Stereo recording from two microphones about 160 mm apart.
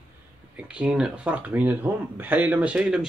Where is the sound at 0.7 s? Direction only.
5° right (ahead or behind).